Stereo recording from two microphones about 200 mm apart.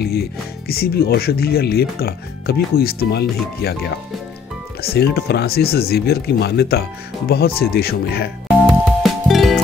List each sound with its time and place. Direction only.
0.0 s speech: 50° left (ahead or behind)
9.0 s music: centre (ahead or behind)